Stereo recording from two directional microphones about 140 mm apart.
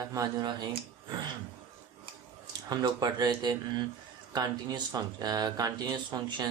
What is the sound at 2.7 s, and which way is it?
Speech, 25° right (ahead or behind).